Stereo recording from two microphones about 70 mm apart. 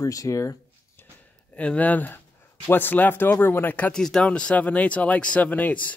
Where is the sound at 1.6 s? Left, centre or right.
Left.